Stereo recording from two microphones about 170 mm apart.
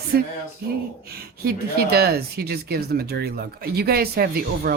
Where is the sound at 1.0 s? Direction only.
65° right (ahead or behind).